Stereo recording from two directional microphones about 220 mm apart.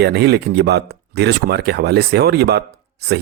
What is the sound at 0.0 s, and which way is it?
A man's voice, 50° right (ahead or behind).